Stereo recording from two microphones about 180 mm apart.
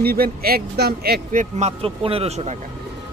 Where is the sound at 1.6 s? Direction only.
30° right (ahead or behind).